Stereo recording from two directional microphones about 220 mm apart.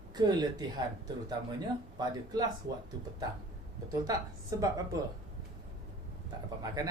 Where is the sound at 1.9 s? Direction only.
15° right (ahead or behind).